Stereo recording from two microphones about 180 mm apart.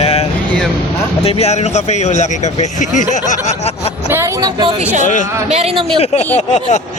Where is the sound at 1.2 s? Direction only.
35° left (ahead or behind).